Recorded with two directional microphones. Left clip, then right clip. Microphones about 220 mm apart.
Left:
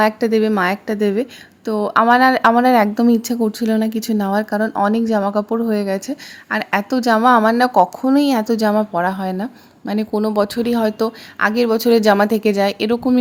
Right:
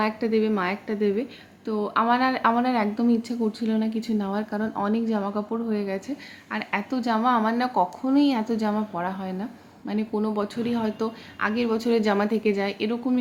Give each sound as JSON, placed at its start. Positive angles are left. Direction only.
{"t": 0.0, "sound": "a woman's voice", "side_deg": 45}